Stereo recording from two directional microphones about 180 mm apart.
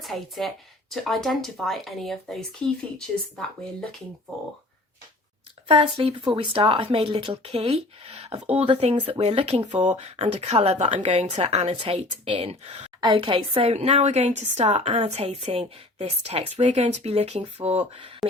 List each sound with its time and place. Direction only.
0.0 s speech: centre (ahead or behind)
5.6 s speech: 30° right (ahead or behind)
13.0 s speech: 25° right (ahead or behind)